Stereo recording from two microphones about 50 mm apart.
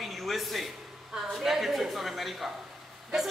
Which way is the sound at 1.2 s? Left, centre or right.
Centre.